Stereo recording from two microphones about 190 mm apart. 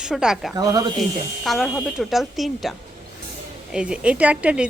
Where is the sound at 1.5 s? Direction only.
Centre (ahead or behind).